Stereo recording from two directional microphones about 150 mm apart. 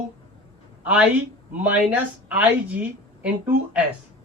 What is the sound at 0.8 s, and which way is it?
Speech, 10° right (ahead or behind).